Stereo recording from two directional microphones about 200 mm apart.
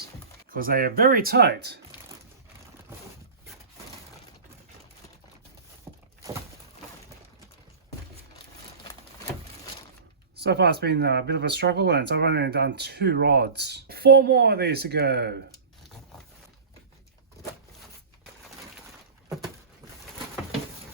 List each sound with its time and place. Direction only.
0.5 s speech: 45° right (ahead or behind)
5.9 s a sound: 15° right (ahead or behind)
10.3 s speech: 55° right (ahead or behind)